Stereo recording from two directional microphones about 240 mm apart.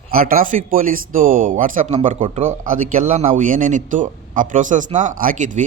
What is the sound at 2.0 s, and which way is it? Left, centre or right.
Speech, right.